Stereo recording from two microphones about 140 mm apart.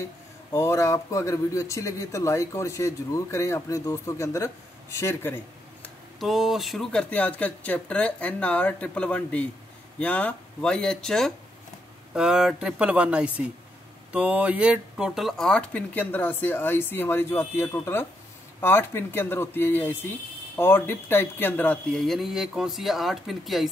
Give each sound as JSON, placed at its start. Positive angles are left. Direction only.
{"t": 0.5, "sound": "speech", "side_deg": 20}
{"t": 6.1, "sound": "speech", "side_deg": 0}
{"t": 22.0, "sound": "speech", "side_deg": 0}